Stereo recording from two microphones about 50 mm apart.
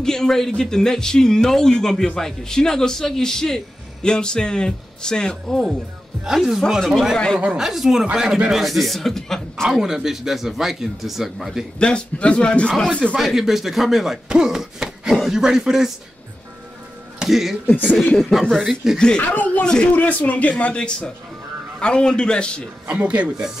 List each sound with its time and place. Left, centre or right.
0.0 s a man's voice: centre
6.2 s speech: centre
9.7 s speech: centre
11.8 s a man's voice: left
13.1 s speech: centre
17.2 s speech: centre
18.9 s a man's voice: centre
19.2 s speech: left
19.6 s a man's voice: centre
20.0 s a man's voice: left
22.8 s speech: right